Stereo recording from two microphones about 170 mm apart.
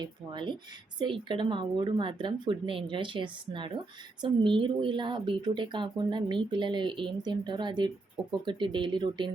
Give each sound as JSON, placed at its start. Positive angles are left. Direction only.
{"t": 0.0, "sound": "speech", "side_deg": -25}